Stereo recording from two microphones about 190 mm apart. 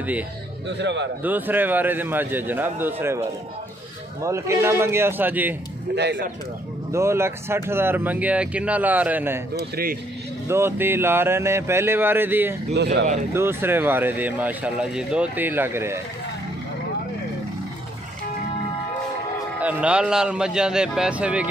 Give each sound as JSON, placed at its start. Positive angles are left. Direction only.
{"t": 0.7, "sound": "a man's voice", "side_deg": -65}
{"t": 1.2, "sound": "speech", "side_deg": -10}
{"t": 4.2, "sound": "speech", "side_deg": -15}
{"t": 5.9, "sound": "a man's voice", "side_deg": -65}
{"t": 6.9, "sound": "speech", "side_deg": -15}
{"t": 9.6, "sound": "speech", "side_deg": -50}
{"t": 10.5, "sound": "speech", "side_deg": -10}
{"t": 12.7, "sound": "a man's voice", "side_deg": -65}
{"t": 13.3, "sound": "speech", "side_deg": -10}
{"t": 19.6, "sound": "a man's voice", "side_deg": -5}